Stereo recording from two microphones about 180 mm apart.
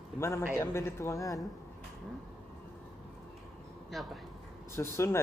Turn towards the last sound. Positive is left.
turn(degrees=15)  # may be behind; listen again after turning